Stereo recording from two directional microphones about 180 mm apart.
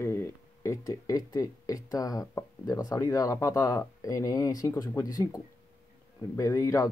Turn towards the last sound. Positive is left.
turn(degrees=15)  # may be behind; listen again after turning